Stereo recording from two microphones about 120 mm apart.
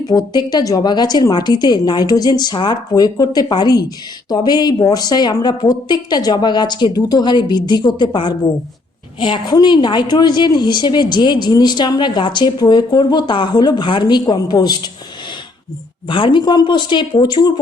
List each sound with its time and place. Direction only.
0.1 s a woman's voice: 35° left (ahead or behind)
16.0 s a woman's voice: 45° left (ahead or behind)